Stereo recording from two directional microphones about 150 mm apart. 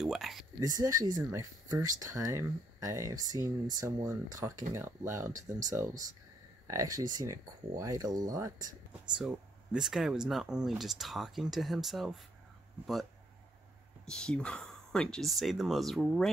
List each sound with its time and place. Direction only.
0.0 s speech: centre (ahead or behind)
0.6 s speech: 25° right (ahead or behind)
9.2 s speech: 5° right (ahead or behind)
14.0 s speech: 5° left (ahead or behind)